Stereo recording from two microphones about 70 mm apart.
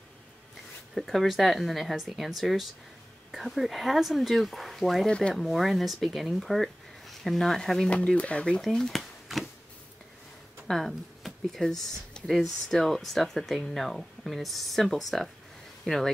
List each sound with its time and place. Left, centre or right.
0.9 s speech: centre
7.9 s speech: centre
8.5 s a sound: centre
10.7 s speech: centre